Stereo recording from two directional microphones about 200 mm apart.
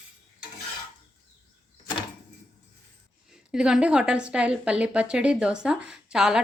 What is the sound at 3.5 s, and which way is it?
A woman's voice, 5° right (ahead or behind).